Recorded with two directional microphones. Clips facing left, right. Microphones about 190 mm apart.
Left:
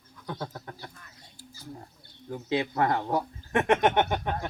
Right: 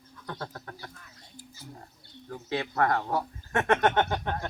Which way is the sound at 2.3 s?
20° left (ahead or behind).